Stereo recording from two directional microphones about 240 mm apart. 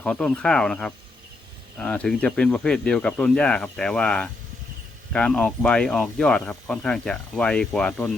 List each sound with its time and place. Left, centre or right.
0.0 s speech: centre